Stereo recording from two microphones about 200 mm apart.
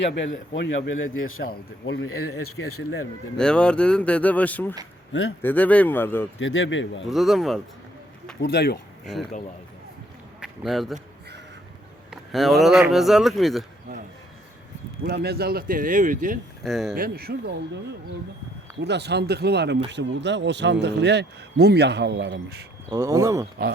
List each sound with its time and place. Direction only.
1.1 s speech: 90° left
3.3 s speech: 5° left (ahead or behind)
6.4 s speech: 75° left (ahead or behind)
7.1 s speech: centre (ahead or behind)
8.4 s speech: 55° left (ahead or behind)
10.4 s a man's voice: centre (ahead or behind)
12.1 s speech: centre (ahead or behind)
15.0 s speech: 55° right (ahead or behind)
16.6 s speech: centre (ahead or behind)
16.9 s speech: 45° right (ahead or behind)
18.8 s speech: 60° right (ahead or behind)
22.9 s speech: 15° right (ahead or behind)